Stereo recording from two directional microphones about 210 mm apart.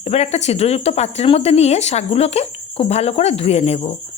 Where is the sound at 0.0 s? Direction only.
30° left (ahead or behind).